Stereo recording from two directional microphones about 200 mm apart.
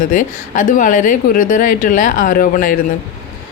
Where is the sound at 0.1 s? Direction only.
40° left (ahead or behind).